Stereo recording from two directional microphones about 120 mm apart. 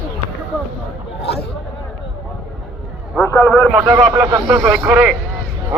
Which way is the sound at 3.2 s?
20° left (ahead or behind).